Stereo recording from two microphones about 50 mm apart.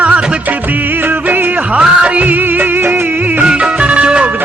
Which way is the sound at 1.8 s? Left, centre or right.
Centre.